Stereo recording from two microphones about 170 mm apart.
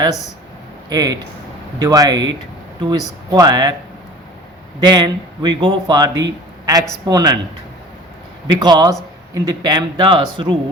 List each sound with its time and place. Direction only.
0.9 s a man's voice: 20° right (ahead or behind)
4.8 s a man's voice: 25° right (ahead or behind)
8.4 s a man's voice: 25° right (ahead or behind)